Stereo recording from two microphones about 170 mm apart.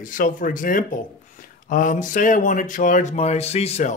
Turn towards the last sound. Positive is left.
turn(degrees=40)  # may be behind; listen again after turning